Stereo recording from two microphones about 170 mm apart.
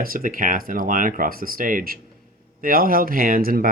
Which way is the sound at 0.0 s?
55° right (ahead or behind).